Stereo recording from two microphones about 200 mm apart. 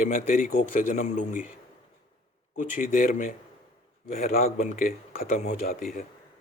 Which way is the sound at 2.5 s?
40° left (ahead or behind).